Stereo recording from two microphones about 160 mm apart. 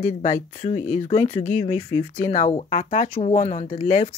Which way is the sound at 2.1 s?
50° left (ahead or behind).